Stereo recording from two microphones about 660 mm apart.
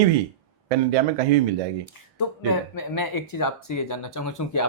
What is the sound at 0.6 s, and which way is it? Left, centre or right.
Speech, right.